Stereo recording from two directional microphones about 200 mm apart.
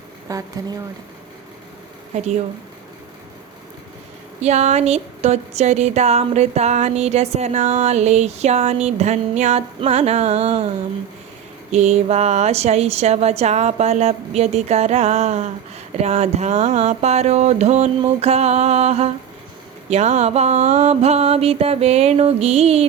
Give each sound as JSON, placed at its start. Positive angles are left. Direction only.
{"t": 0.3, "sound": "speech", "side_deg": -15}
{"t": 4.4, "sound": "speech", "side_deg": -35}
{"t": 11.7, "sound": "speech", "side_deg": -35}